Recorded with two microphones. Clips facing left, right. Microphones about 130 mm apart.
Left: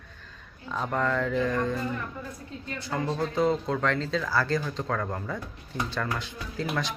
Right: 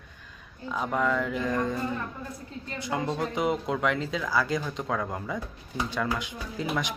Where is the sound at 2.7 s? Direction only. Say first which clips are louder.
Even; 15° right (ahead or behind).